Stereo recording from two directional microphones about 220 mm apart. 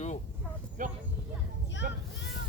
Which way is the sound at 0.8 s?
35° right (ahead or behind).